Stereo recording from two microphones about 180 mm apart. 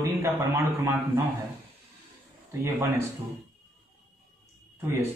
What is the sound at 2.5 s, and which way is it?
Speech, 15° right (ahead or behind).